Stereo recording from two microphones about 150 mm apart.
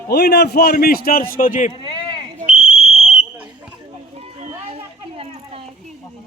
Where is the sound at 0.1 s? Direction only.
90° left; by 1.7 s 60° left (ahead or behind).